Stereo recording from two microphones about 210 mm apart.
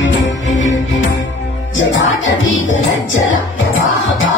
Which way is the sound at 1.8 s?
65° left (ahead or behind).